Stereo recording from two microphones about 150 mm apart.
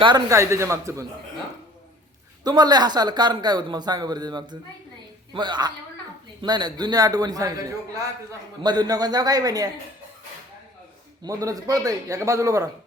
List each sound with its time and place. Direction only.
0.0 s a man's voice: 25° right (ahead or behind)
2.4 s a man's voice: 25° right (ahead or behind)
11.2 s a man's voice: 20° right (ahead or behind)